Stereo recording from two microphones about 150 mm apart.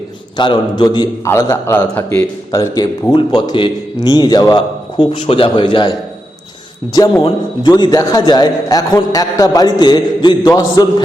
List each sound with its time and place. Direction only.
0.3 s a man's voice: 30° left (ahead or behind)
7.2 s a man's voice: 35° left (ahead or behind)